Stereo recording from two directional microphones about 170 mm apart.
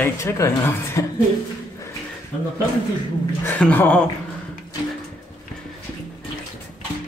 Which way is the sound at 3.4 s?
10° left (ahead or behind).